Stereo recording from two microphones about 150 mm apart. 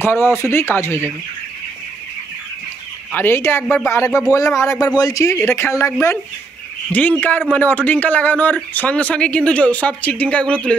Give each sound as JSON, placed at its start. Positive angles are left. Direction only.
{"t": 0.0, "sound": "speech", "side_deg": 15}
{"t": 3.1, "sound": "speech", "side_deg": 15}